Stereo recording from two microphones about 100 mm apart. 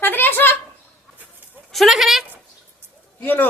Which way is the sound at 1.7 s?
Centre (ahead or behind).